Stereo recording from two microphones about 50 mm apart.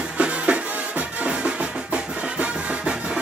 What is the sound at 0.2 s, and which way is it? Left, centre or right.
Music, right.